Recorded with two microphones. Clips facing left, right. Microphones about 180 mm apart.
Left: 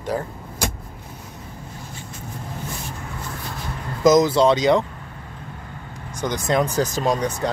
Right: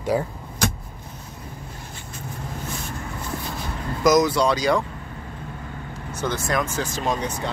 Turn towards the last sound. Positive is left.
turn(degrees=40)  # may be behind; listen again after turning